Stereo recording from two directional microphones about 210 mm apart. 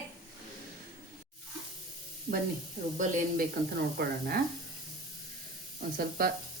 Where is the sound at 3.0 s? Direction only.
45° right (ahead or behind).